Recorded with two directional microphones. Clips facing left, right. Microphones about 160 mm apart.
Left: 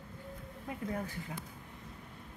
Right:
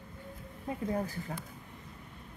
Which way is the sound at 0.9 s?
35° right (ahead or behind).